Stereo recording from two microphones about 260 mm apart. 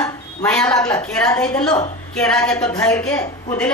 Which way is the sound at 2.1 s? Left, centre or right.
Centre.